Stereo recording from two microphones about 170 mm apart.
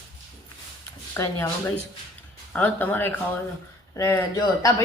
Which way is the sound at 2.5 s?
10° left (ahead or behind).